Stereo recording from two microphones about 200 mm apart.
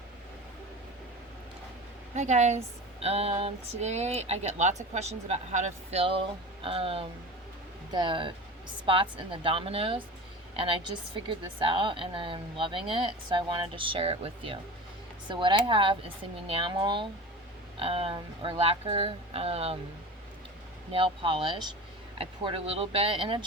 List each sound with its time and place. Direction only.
2.1 s a woman's voice: 35° right (ahead or behind)
20.9 s a woman's voice: 25° right (ahead or behind)